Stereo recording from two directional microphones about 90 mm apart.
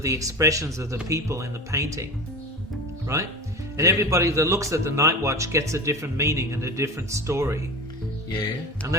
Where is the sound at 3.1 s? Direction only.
35° right (ahead or behind).